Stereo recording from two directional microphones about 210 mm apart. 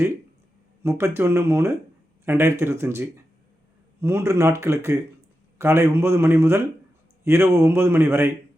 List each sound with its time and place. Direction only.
0.8 s speech: 10° right (ahead or behind)